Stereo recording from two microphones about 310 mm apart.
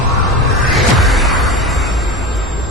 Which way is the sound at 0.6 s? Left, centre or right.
Centre.